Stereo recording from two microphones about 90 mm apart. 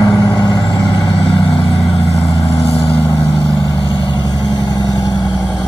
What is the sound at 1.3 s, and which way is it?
Vehicle, 85° left.